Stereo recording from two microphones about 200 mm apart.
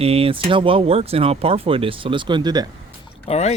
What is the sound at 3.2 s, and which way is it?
Speech, 30° left (ahead or behind).